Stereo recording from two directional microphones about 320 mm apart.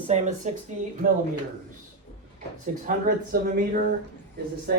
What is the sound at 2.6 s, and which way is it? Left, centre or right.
Speech, right.